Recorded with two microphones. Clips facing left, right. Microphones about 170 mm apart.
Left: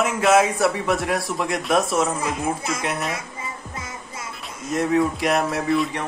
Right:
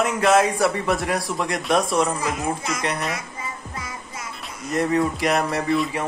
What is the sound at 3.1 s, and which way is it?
Music, 25° left (ahead or behind).